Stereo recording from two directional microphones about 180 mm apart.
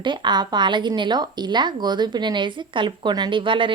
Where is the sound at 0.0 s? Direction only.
25° right (ahead or behind).